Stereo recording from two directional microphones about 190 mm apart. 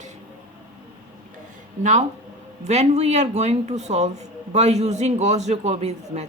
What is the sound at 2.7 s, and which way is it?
Speech, 35° right (ahead or behind).